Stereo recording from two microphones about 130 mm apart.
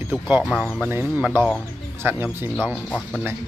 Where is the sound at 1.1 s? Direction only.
15° right (ahead or behind).